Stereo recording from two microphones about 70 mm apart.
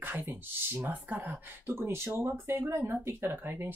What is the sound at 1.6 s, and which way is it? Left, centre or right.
Speech, right.